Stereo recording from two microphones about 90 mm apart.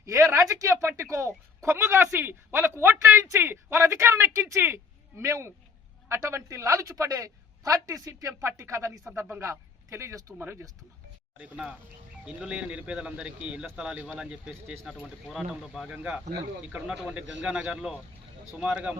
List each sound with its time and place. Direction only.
0.0 s a woman's voice: 35° right (ahead or behind)
11.3 s speech: 15° right (ahead or behind)
15.3 s speech: centre (ahead or behind)
15.9 s speech: 10° right (ahead or behind)